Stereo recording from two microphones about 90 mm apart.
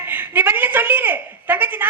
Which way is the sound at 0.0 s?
20° right (ahead or behind).